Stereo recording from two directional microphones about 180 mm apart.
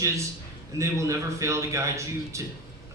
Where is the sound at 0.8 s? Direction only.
15° right (ahead or behind).